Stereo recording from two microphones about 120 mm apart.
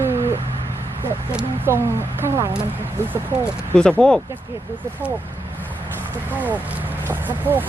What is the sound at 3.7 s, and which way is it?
Speech, 5° left (ahead or behind).